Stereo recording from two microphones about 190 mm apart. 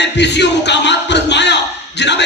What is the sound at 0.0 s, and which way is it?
Music, 65° left (ahead or behind).